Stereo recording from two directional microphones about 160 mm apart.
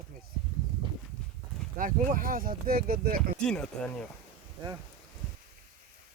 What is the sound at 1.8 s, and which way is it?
Speech, 60° right (ahead or behind).